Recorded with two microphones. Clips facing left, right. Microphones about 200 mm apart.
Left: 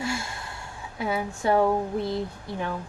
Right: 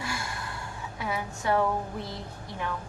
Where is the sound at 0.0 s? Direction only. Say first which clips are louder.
Left 4 dB; 25° left (ahead or behind).